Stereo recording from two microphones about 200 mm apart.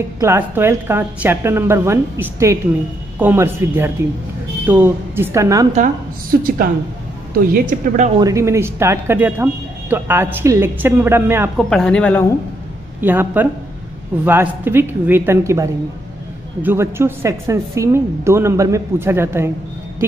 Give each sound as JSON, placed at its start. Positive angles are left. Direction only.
{"t": 0.2, "sound": "speech", "side_deg": -10}
{"t": 7.3, "sound": "a woman's voice", "side_deg": -45}
{"t": 8.2, "sound": "speech", "side_deg": -15}
{"t": 11.5, "sound": "speech", "side_deg": 5}
{"t": 13.0, "sound": "speech", "side_deg": -10}